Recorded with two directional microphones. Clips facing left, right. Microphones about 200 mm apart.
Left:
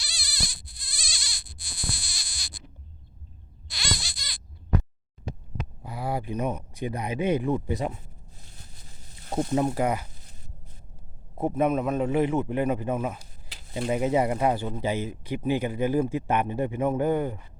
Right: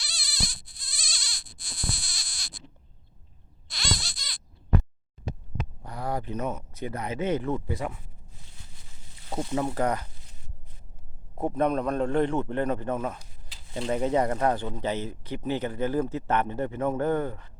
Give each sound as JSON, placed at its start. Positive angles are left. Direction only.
{"t": 0.0, "sound": "a sound", "side_deg": 10}
{"t": 2.0, "sound": "baby cry", "side_deg": 5}
{"t": 3.9, "sound": "baby cry", "side_deg": 10}
{"t": 5.8, "sound": "speech", "side_deg": 5}
{"t": 8.4, "sound": "a sound", "side_deg": 40}
{"t": 9.6, "sound": "speech", "side_deg": 20}
{"t": 9.8, "sound": "speech", "side_deg": 10}
{"t": 11.3, "sound": "speech", "side_deg": 10}